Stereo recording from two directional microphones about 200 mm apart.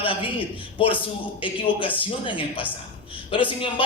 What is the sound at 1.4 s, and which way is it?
A man's voice, 25° left (ahead or behind).